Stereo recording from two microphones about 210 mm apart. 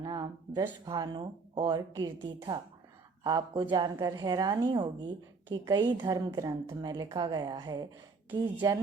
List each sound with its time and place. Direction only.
0.0 s a woman's voice: 20° right (ahead or behind)